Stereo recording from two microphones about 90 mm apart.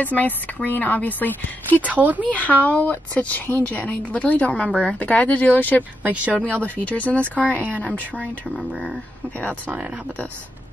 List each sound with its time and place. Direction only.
0.0 s speech: 20° left (ahead or behind)
1.8 s speech: 20° right (ahead or behind)
2.2 s speech: 15° left (ahead or behind)
6.0 s speech: 15° right (ahead or behind)
6.3 s speech: 15° left (ahead or behind)